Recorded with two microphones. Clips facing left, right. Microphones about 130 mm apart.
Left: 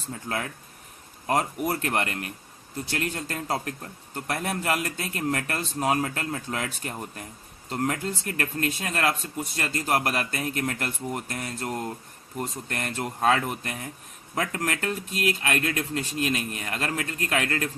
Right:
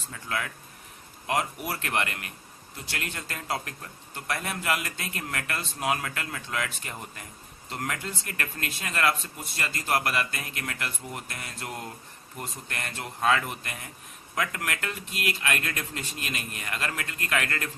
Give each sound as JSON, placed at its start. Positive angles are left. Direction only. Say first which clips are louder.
{"t": 0.1, "sound": "a man's voice", "louder": "left 2 dB", "side_deg": 35}